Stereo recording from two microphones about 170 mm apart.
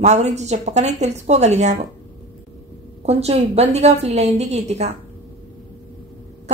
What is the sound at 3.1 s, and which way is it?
Speech, 40° right (ahead or behind).